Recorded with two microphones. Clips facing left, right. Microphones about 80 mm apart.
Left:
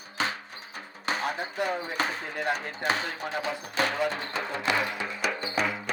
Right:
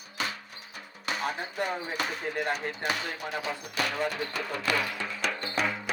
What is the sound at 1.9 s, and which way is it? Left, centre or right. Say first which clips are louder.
Speech: left 1 dB; left.